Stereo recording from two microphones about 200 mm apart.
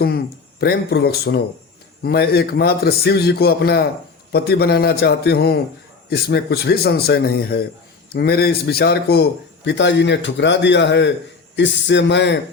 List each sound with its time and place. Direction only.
0.6 s a man's voice: 50° left (ahead or behind)